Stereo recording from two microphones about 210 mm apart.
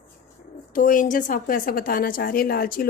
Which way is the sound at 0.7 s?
40° left (ahead or behind).